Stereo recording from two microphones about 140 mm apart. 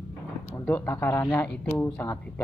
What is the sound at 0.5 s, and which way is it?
Speech, 15° left (ahead or behind).